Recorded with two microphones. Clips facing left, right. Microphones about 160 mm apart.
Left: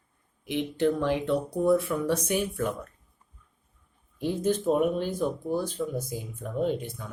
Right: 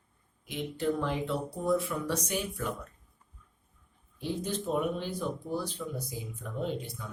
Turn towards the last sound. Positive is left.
turn(degrees=50)  # may be behind; listen again after turning